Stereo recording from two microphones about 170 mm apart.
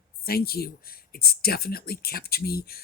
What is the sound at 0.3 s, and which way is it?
Speech, 65° left (ahead or behind).